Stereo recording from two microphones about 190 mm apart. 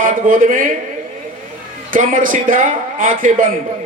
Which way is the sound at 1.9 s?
45° right (ahead or behind).